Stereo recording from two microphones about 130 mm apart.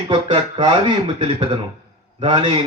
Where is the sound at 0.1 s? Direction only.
40° right (ahead or behind).